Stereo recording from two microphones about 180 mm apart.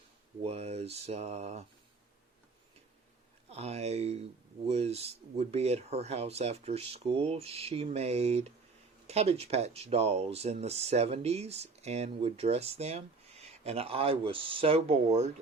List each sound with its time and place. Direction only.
0.4 s speech: 35° right (ahead or behind)
3.5 s speech: 35° right (ahead or behind)